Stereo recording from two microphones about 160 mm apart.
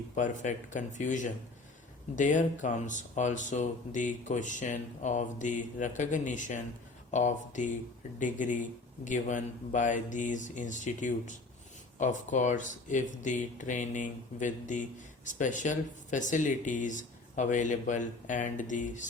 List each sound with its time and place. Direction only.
0.2 s speech: 50° left (ahead or behind)